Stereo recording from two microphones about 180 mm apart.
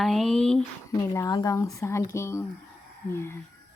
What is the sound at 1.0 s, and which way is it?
Speech, 20° left (ahead or behind).